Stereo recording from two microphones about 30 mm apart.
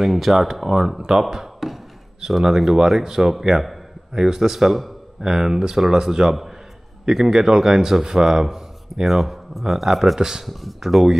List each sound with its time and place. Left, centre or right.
0.0 s speech: centre
0.7 s speech: centre
1.2 s a sound: centre
2.2 s speech: centre
5.2 s speech: centre
10.1 s speech: centre
10.4 s speech: centre